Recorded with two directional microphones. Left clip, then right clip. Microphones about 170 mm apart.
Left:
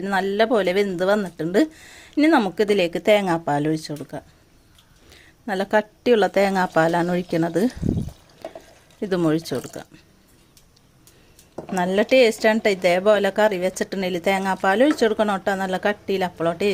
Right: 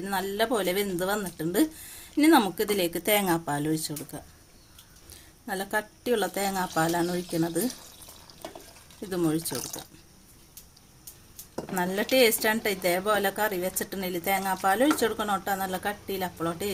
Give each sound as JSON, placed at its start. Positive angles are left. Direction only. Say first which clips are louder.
{"t": 0.0, "sound": "speech", "louder": "left 8 dB", "side_deg": 45}
{"t": 5.5, "sound": "speech", "louder": "left 9 dB", "side_deg": 45}
{"t": 9.0, "sound": "speech", "louder": "left 7 dB", "side_deg": 40}
{"t": 11.7, "sound": "speech", "louder": "left 8 dB", "side_deg": 40}